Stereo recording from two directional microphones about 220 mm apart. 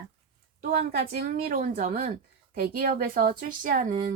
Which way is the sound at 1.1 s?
45° right (ahead or behind).